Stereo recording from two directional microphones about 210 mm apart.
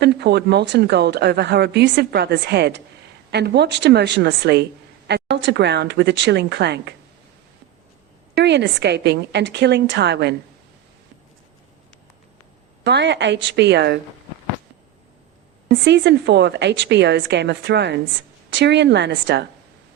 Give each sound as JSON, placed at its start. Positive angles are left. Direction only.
{"t": 0.0, "sound": "a woman's voice", "side_deg": -50}
{"t": 8.4, "sound": "a woman's voice", "side_deg": -55}
{"t": 12.8, "sound": "a woman's voice", "side_deg": -55}
{"t": 15.7, "sound": "a woman's voice", "side_deg": -55}